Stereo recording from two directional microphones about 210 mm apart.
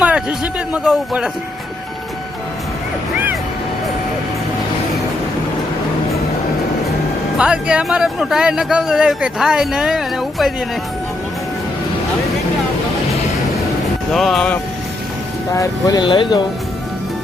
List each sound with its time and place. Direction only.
0.0 s speech: 5° right (ahead or behind)
7.3 s speech: 5° right (ahead or behind)
14.1 s speech: centre (ahead or behind)
15.5 s speech: 15° left (ahead or behind)